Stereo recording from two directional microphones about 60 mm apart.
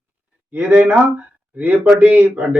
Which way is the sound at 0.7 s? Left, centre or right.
Right.